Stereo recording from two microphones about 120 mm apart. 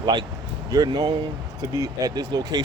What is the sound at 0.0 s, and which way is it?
Speech, 40° right (ahead or behind).